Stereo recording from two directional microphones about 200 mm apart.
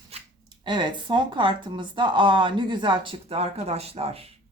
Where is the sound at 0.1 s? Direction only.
30° right (ahead or behind).